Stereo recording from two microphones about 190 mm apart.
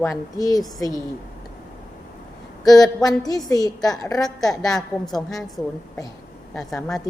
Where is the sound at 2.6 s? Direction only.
20° left (ahead or behind).